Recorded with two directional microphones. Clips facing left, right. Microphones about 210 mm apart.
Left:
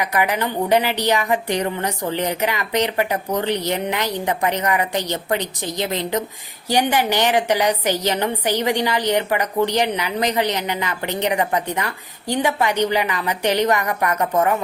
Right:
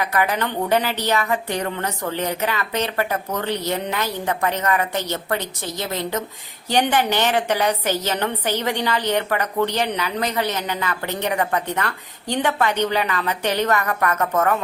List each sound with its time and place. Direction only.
0.0 s a woman's voice: 15° left (ahead or behind)